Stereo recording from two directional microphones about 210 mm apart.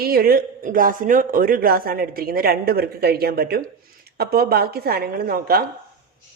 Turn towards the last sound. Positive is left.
turn(degrees=-45)  # may be behind; listen again after turning